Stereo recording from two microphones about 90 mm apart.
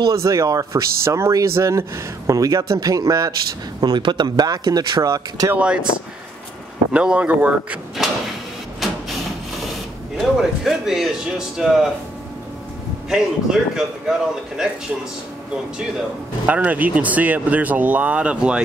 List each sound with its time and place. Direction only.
0.1 s speech: 35° right (ahead or behind)
3.8 s speech: 55° right (ahead or behind); by 5.5 s 40° right (ahead or behind)
5.5 s speech: 10° right (ahead or behind)
6.9 s speech: 10° right (ahead or behind)
8.8 s printer: centre (ahead or behind)
10.1 s speech: centre (ahead or behind)
13.1 s speech: 5° right (ahead or behind)
16.4 s speech: 15° right (ahead or behind)